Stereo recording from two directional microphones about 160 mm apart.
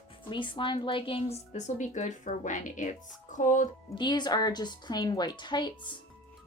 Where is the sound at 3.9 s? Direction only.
30° left (ahead or behind).